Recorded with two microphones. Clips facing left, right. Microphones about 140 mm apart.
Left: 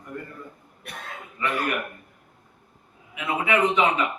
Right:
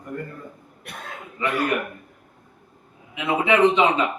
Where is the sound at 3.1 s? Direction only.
25° right (ahead or behind).